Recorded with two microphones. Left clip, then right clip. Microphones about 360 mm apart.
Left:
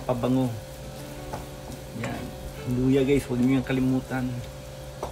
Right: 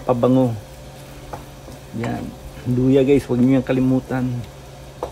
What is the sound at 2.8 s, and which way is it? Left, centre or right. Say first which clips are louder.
Speech: right 7 dB; right.